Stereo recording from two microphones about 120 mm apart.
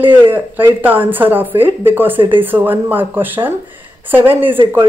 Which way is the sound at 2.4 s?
15° right (ahead or behind).